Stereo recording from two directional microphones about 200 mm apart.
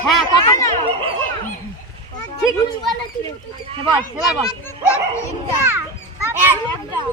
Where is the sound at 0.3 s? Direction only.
15° left (ahead or behind).